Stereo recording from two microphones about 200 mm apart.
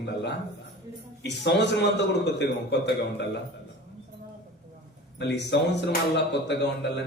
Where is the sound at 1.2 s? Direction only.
60° left (ahead or behind).